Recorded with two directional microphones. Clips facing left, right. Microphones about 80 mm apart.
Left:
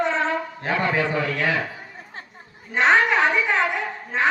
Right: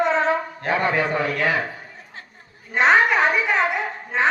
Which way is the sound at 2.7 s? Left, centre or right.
Centre.